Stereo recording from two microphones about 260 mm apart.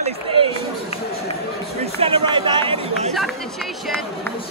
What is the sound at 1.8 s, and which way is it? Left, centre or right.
Speech, right.